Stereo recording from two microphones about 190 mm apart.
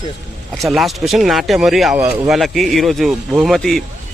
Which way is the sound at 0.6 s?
Centre (ahead or behind).